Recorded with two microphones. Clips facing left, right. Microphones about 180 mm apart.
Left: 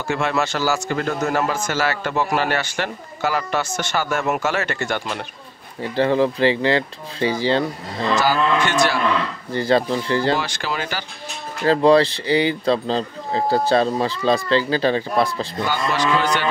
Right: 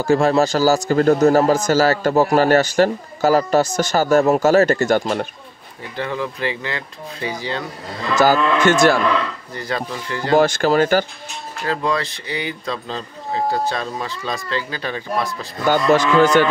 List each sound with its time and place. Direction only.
0.0 s a man's voice: 35° right (ahead or behind)
5.9 s speech: 30° left (ahead or behind)
8.2 s speech: 45° right (ahead or behind)
9.5 s speech: 30° left (ahead or behind)
10.3 s speech: 45° right (ahead or behind)
11.6 s speech: 30° left (ahead or behind)
15.7 s speech: 50° right (ahead or behind)